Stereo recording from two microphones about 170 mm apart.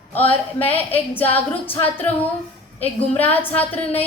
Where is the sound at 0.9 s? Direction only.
10° left (ahead or behind).